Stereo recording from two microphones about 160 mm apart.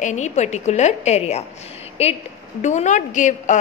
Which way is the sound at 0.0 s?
50° left (ahead or behind).